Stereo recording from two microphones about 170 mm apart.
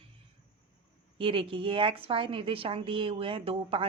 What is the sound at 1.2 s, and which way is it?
A woman's voice, 30° right (ahead or behind).